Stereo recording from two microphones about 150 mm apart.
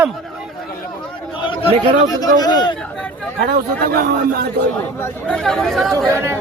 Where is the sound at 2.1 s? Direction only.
25° left (ahead or behind).